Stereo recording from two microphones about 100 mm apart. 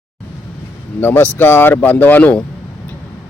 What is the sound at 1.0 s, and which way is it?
Speech, 20° left (ahead or behind).